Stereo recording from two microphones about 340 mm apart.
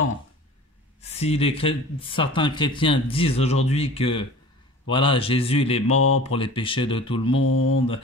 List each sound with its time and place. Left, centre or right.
1.0 s speech: centre